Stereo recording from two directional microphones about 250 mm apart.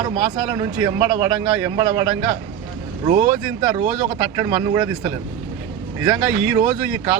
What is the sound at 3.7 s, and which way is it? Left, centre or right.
A man's voice, centre.